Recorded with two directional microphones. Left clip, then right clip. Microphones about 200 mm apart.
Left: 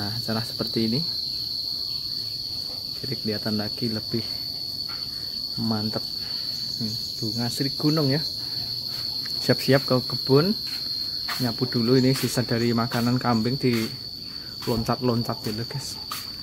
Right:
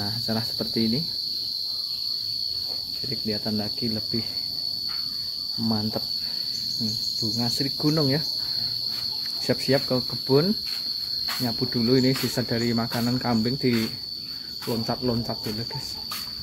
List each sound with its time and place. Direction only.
0.3 s speech: 15° left (ahead or behind)
3.3 s cricket: 20° left (ahead or behind)
7.3 s speech: 10° left (ahead or behind)
9.5 s cricket: 25° left (ahead or behind)
11.4 s speech: 15° left (ahead or behind)
14.7 s cricket: 25° left (ahead or behind)